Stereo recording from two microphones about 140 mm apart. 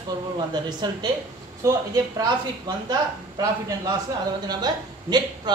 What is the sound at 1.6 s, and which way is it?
Speech, 20° right (ahead or behind).